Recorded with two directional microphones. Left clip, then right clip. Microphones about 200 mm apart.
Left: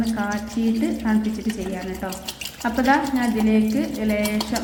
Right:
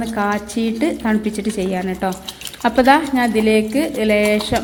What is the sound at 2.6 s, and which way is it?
Speech, 40° right (ahead or behind).